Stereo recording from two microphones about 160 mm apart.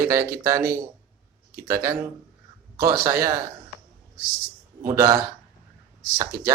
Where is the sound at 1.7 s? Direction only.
20° right (ahead or behind).